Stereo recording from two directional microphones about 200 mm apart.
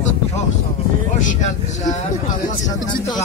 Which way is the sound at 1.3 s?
35° left (ahead or behind).